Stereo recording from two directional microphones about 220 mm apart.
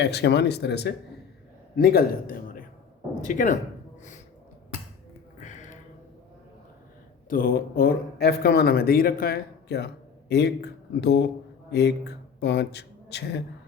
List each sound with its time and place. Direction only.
0.0 s a man's voice: 50° left (ahead or behind); by 3.6 s 35° left (ahead or behind)
5.4 s a sound: 35° left (ahead or behind)
7.3 s speech: 40° left (ahead or behind)